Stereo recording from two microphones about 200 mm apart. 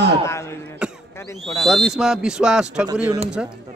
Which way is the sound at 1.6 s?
Centre (ahead or behind).